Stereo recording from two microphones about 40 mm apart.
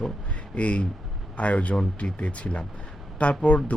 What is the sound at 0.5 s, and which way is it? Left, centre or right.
Speech, left.